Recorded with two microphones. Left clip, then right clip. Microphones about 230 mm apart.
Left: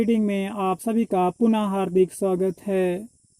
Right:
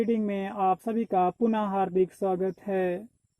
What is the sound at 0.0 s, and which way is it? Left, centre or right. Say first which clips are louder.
Speech: left 4 dB; left.